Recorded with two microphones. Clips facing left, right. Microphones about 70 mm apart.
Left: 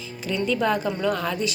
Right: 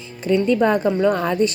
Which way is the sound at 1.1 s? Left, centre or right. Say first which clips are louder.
Right 6 dB; right.